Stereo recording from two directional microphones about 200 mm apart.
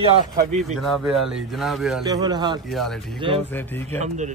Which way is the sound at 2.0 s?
20° right (ahead or behind).